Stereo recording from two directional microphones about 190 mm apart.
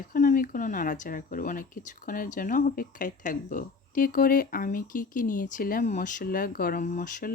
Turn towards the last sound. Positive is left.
turn(degrees=45)  # may be behind; listen again after turning